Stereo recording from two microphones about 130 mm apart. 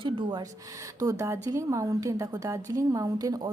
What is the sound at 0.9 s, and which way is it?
A woman's voice, 25° right (ahead or behind).